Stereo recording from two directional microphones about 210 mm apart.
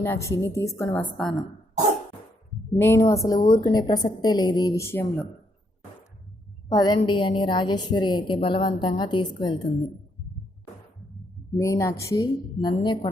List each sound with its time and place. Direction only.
0.0 s a woman's voice: 10° left (ahead or behind)
2.7 s a woman's voice: 10° left (ahead or behind)
6.7 s a woman's voice: 20° left (ahead or behind)
11.5 s a woman's voice: 15° left (ahead or behind)